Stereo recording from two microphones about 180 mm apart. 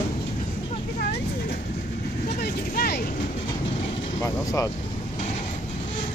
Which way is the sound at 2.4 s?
60° left (ahead or behind).